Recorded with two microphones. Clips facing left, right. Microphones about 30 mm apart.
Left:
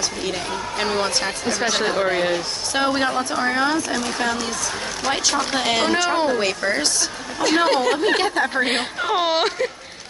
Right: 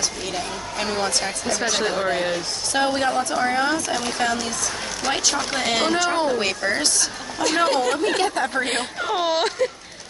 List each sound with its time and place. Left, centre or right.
0.3 s speech: left
5.0 s speech: centre
7.3 s speech: centre